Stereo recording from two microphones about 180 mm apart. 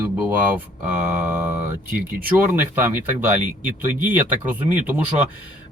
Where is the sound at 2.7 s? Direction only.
15° right (ahead or behind).